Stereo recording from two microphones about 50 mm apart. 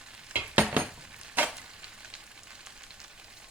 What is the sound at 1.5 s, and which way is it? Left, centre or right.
Frying, centre.